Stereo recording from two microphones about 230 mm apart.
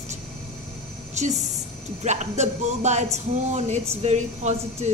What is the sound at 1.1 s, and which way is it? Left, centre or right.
Speech, right.